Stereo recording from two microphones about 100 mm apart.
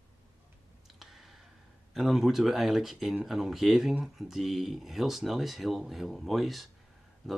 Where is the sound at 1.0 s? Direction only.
Centre (ahead or behind).